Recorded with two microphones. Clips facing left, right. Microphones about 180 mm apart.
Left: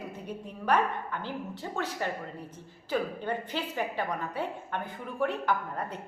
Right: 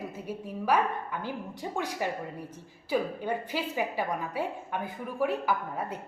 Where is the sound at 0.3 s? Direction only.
5° right (ahead or behind).